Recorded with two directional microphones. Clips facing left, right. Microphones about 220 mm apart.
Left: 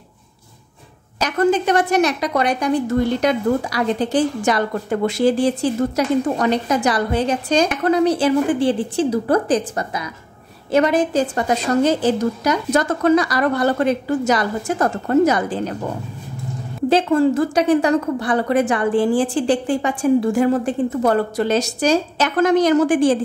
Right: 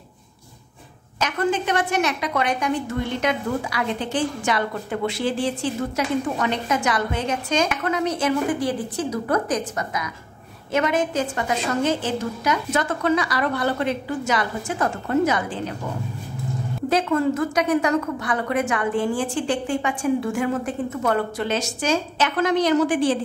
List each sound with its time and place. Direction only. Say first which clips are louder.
1.2 s a woman's voice: left 6 dB; 40° left (ahead or behind)
16.9 s a woman's voice: left 5 dB; 30° left (ahead or behind); by 23.1 s 45° left (ahead or behind)